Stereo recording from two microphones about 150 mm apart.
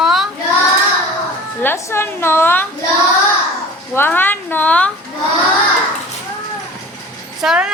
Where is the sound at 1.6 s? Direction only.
15° left (ahead or behind).